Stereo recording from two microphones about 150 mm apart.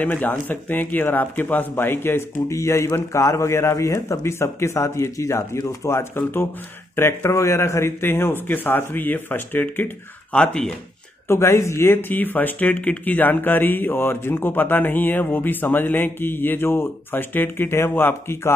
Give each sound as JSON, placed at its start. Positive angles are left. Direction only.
{"t": 0.0, "sound": "speech", "side_deg": 10}
{"t": 11.2, "sound": "speech", "side_deg": 15}